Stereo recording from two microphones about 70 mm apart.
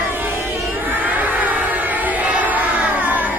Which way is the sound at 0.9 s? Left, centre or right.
Right.